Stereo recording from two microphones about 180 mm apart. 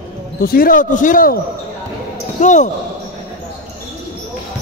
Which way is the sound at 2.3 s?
45° left (ahead or behind).